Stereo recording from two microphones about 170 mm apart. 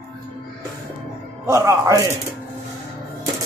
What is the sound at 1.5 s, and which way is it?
Speech, 20° right (ahead or behind).